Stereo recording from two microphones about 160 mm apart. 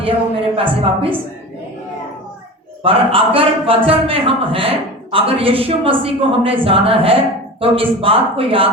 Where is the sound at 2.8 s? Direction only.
35° right (ahead or behind).